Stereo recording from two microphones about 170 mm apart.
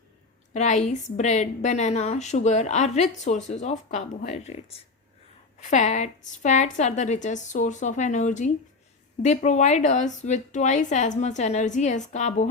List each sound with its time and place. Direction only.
0.5 s a woman's voice: 45° left (ahead or behind)